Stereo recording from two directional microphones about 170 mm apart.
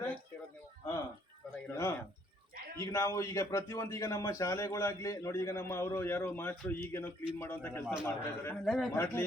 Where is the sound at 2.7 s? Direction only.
20° left (ahead or behind).